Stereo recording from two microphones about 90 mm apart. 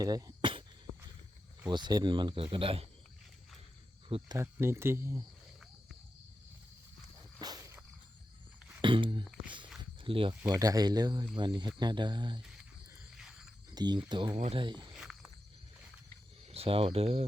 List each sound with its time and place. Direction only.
0.0 s speech: 45° right (ahead or behind)
1.7 s speech: 50° right (ahead or behind); by 2.8 s 85° right
4.1 s speech: 90° right
4.6 s speech: 30° right (ahead or behind)
7.3 s a sound: 45° right (ahead or behind)
8.8 s a sound: 65° right (ahead or behind)
10.0 s speech: 75° right (ahead or behind)
10.5 s speech: 45° right (ahead or behind)
12.4 s a sound: 5° right (ahead or behind)
13.7 s speech: 50° right (ahead or behind)
14.9 s walk: 5° right (ahead or behind)
16.5 s speech: 90° right